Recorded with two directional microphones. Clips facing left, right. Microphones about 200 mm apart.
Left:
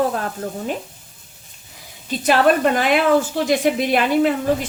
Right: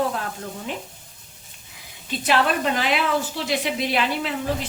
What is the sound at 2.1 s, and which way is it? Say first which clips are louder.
A woman's voice: left 6 dB; 45° left (ahead or behind).